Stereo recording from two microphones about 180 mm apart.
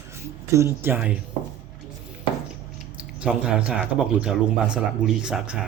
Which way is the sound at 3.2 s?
5° right (ahead or behind).